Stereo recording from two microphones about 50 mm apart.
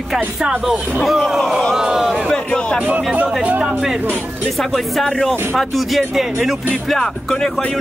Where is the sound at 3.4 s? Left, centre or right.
Right.